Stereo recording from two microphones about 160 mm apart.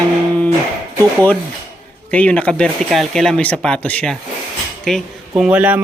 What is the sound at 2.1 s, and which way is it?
A man's voice, 10° left (ahead or behind).